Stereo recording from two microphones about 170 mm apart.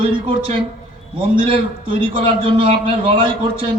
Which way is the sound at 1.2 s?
30° right (ahead or behind).